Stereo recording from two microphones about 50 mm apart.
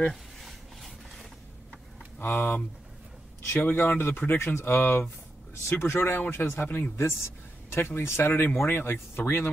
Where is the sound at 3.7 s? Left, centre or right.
Left.